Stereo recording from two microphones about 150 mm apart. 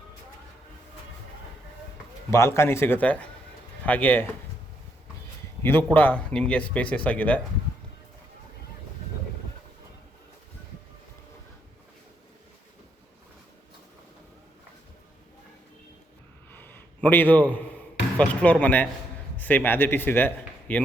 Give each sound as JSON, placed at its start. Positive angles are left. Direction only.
{"t": 2.3, "sound": "a man's voice", "side_deg": 20}
{"t": 5.6, "sound": "a man's voice", "side_deg": 15}
{"t": 16.5, "sound": "a sound", "side_deg": 15}
{"t": 18.2, "sound": "a man's voice", "side_deg": 5}